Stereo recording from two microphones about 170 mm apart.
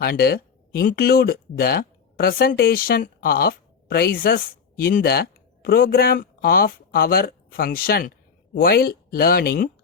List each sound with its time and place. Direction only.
0.0 s speech: 70° left (ahead or behind)